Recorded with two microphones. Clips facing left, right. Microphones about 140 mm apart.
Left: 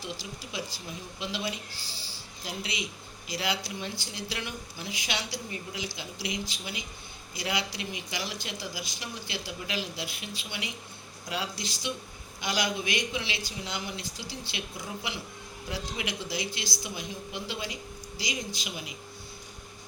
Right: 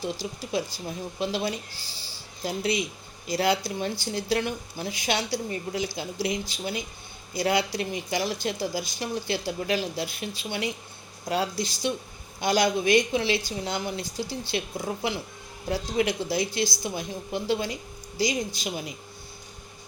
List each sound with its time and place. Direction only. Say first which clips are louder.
0.2 s speech: right 8 dB; 50° right (ahead or behind)
7.3 s speech: right 8 dB; 50° right (ahead or behind)